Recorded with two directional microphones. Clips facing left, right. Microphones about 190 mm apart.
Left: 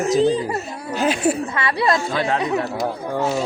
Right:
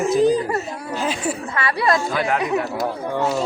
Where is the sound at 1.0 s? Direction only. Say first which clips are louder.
Left 6 dB; 70° left (ahead or behind).